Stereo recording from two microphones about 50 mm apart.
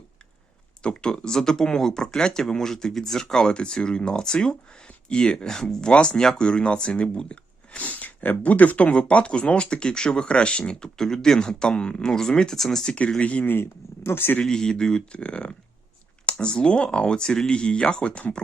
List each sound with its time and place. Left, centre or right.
0.8 s speech: centre
13.5 s speech: left
14.4 s speech: centre